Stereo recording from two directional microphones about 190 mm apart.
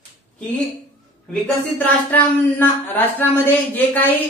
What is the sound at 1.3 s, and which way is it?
Speech, 10° left (ahead or behind).